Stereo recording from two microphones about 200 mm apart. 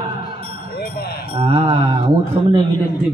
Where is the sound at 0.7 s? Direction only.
55° left (ahead or behind).